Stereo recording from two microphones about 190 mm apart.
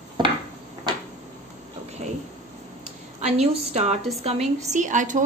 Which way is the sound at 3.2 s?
35° right (ahead or behind).